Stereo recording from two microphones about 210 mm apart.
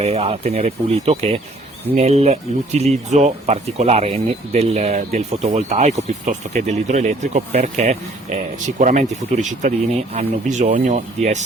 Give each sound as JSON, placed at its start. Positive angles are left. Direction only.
{"t": 0.0, "sound": "speech", "side_deg": -30}